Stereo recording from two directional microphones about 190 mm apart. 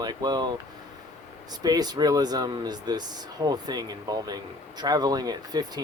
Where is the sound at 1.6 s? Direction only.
20° right (ahead or behind).